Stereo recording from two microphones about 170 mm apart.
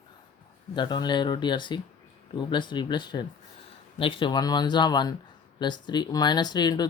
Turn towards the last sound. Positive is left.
turn(degrees=25)  # may be behind; listen again after turning